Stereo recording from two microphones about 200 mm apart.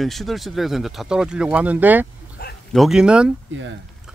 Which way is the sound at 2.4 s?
50° left (ahead or behind).